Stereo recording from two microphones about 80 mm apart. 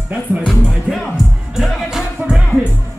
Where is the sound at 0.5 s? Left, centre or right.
Centre.